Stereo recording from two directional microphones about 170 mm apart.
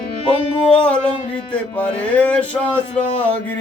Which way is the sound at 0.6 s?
5° left (ahead or behind).